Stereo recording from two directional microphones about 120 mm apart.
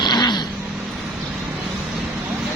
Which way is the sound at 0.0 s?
35° left (ahead or behind).